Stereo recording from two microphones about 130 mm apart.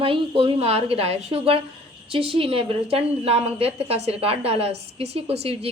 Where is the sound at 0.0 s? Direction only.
45° right (ahead or behind).